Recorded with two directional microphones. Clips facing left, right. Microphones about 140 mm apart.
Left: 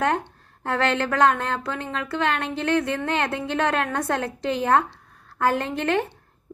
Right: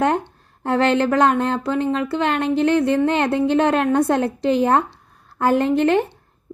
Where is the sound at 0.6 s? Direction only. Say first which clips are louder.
Right 6 dB; 30° right (ahead or behind).